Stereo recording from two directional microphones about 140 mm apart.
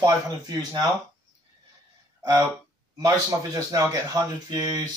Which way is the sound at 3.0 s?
25° right (ahead or behind).